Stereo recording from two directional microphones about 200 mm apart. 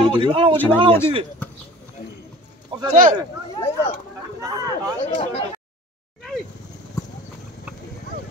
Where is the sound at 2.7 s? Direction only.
25° right (ahead or behind).